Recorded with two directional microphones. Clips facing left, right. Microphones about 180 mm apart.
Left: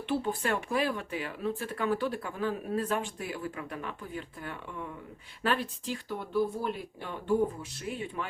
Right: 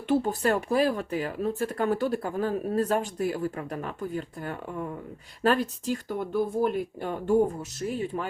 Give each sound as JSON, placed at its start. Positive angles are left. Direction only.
{"t": 0.1, "sound": "speech", "side_deg": -40}